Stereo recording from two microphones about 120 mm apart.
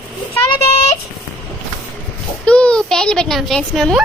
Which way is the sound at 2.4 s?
10° left (ahead or behind).